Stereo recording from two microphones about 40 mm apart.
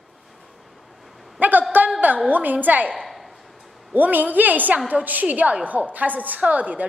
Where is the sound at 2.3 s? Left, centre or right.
Right.